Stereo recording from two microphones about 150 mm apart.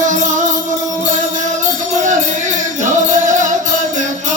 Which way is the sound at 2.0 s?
55° right (ahead or behind).